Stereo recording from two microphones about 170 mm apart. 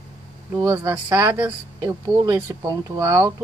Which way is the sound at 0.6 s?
15° right (ahead or behind).